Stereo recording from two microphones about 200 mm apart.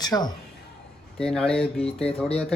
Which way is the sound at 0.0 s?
20° left (ahead or behind).